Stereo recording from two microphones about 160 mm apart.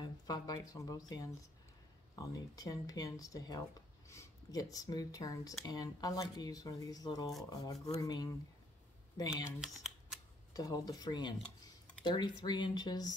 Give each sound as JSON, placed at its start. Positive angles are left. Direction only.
{"t": 0.0, "sound": "speech", "side_deg": 25}
{"t": 9.6, "sound": "speech", "side_deg": 0}
{"t": 10.5, "sound": "speech", "side_deg": 25}